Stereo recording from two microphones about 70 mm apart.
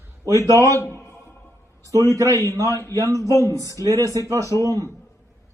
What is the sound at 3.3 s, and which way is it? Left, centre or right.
Speech, left.